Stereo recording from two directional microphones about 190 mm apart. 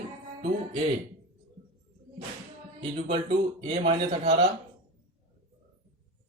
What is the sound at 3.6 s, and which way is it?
Speech, 30° right (ahead or behind).